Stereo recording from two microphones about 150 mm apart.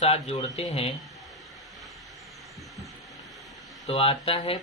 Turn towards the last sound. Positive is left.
turn(degrees=40)  # may be behind; listen again after turning